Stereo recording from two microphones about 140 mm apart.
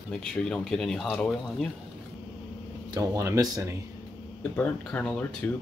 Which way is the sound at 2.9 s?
25° right (ahead or behind).